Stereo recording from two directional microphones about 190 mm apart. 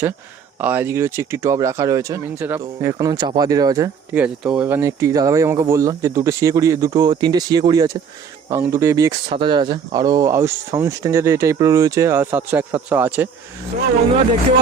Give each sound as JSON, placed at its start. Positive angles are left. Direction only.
{"t": 0.6, "sound": "speech", "side_deg": -10}
{"t": 4.1, "sound": "speech", "side_deg": -5}